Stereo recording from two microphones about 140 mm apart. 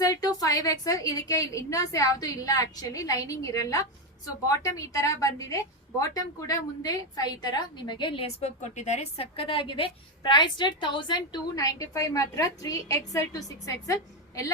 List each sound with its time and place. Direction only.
0.0 s a woman's voice: 25° left (ahead or behind)